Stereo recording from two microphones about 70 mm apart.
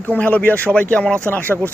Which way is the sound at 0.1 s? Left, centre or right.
Left.